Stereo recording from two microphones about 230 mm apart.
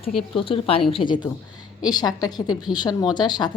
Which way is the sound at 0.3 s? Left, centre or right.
Left.